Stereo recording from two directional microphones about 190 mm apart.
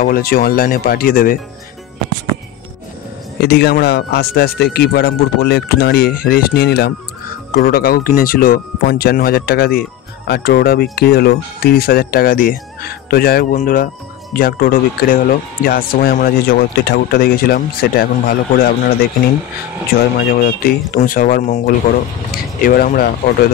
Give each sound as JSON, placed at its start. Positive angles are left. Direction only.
{"t": 0.0, "sound": "speech", "side_deg": 50}
{"t": 3.3, "sound": "speech", "side_deg": 60}
{"t": 20.3, "sound": "speech", "side_deg": 50}